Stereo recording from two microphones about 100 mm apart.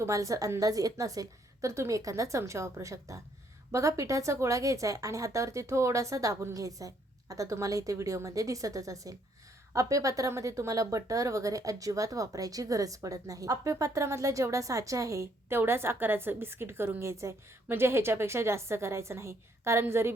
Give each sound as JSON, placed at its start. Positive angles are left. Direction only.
{"t": 0.0, "sound": "speech", "side_deg": -35}